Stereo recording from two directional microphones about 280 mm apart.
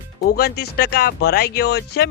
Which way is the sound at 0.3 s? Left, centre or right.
Left.